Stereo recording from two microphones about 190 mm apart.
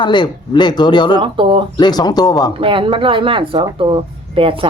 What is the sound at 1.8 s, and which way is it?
Speech, 20° left (ahead or behind).